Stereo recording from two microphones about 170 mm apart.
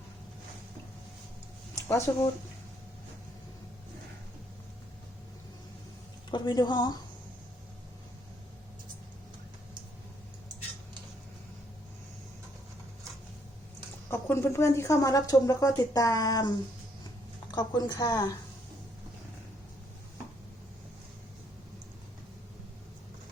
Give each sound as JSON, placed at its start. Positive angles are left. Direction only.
{"t": 1.7, "sound": "speech", "side_deg": 15}
{"t": 6.3, "sound": "speech", "side_deg": 25}
{"t": 14.1, "sound": "speech", "side_deg": 15}